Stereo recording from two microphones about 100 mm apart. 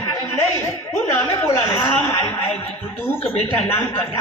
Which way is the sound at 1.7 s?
25° left (ahead or behind).